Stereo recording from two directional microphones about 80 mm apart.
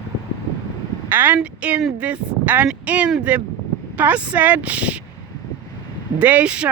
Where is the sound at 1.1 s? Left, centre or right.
Right.